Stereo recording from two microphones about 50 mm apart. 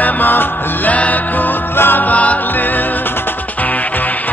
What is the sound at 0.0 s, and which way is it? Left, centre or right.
Music, left.